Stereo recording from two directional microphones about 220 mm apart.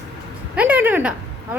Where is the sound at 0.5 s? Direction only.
10° right (ahead or behind).